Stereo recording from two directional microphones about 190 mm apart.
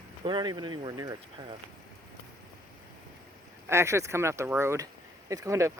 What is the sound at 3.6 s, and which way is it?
Speech, 15° right (ahead or behind).